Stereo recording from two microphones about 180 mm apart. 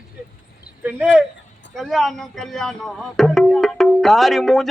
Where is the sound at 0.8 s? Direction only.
5° right (ahead or behind).